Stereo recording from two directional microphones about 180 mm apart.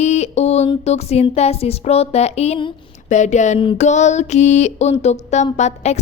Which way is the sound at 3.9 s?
40° left (ahead or behind).